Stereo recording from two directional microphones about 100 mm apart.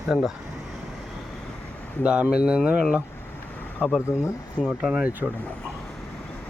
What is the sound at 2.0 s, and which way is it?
Speech, 10° right (ahead or behind).